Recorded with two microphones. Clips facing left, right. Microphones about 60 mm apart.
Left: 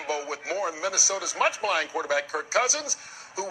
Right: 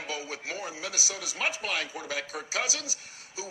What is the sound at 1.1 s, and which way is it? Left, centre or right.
A man's voice, left.